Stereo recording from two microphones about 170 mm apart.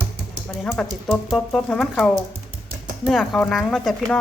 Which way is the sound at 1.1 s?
Centre (ahead or behind).